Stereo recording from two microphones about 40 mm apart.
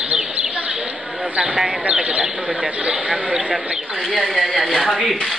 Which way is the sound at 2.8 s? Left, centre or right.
Right.